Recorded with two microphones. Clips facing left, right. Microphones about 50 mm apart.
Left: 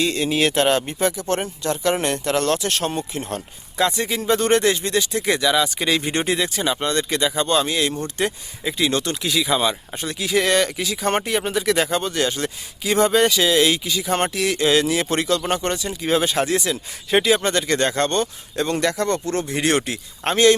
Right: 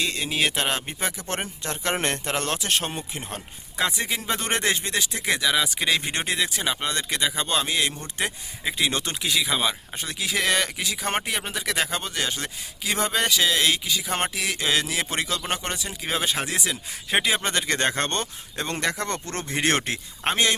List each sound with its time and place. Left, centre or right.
0.0 s speech: centre
1.1 s speech: right
9.2 s speech: centre; by 19.0 s right
19.0 s speech: right
20.2 s speech: centre